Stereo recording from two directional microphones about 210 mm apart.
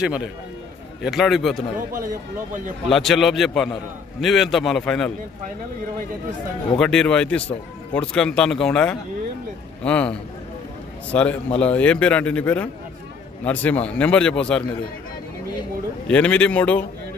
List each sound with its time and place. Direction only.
0.0 s a man's voice: 5° right (ahead or behind)
2.0 s speech: 40° right (ahead or behind)
2.9 s a man's voice: centre (ahead or behind)
6.8 s a man's voice: 5° left (ahead or behind)
11.1 s a man's voice: 5° left (ahead or behind)
16.1 s a man's voice: 5° left (ahead or behind)